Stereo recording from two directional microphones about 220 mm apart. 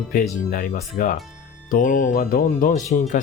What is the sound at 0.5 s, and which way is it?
Speech, 40° left (ahead or behind).